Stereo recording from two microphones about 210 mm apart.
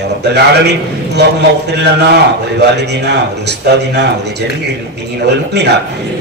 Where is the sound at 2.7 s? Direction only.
55° right (ahead or behind).